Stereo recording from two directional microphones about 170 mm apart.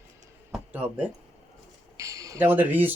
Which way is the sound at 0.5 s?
10° right (ahead or behind).